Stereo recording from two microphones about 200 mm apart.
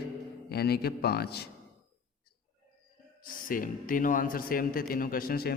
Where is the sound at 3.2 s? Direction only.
45° left (ahead or behind).